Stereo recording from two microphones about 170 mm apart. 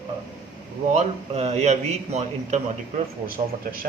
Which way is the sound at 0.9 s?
40° right (ahead or behind).